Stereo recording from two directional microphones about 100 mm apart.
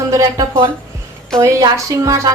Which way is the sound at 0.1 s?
35° right (ahead or behind).